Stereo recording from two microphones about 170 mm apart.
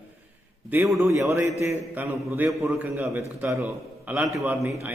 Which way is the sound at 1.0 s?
20° right (ahead or behind).